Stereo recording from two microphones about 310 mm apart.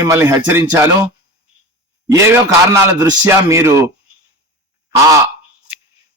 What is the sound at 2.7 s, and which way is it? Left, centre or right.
Speech, centre.